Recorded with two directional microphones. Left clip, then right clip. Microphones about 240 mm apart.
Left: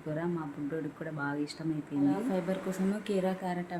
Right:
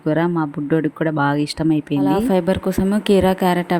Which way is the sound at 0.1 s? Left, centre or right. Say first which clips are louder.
Right 17 dB; right.